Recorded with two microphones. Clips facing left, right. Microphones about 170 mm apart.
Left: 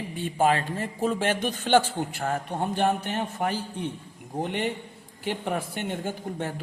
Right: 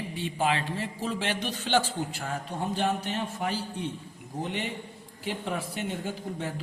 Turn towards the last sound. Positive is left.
turn(degrees=50)  # may be behind; listen again after turning